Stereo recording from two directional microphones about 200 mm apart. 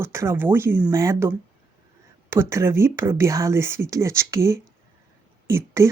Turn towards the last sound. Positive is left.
turn(degrees=-15)  # may be behind; listen again after turning